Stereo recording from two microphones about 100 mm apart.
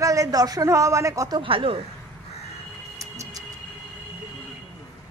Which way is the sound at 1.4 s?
65° right (ahead or behind).